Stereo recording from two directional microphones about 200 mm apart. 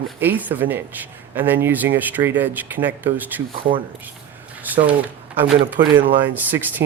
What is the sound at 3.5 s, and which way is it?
Speech, 25° right (ahead or behind).